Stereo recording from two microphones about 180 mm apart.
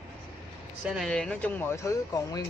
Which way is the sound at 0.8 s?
Centre (ahead or behind).